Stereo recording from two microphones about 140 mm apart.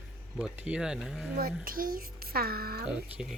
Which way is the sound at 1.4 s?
90° right.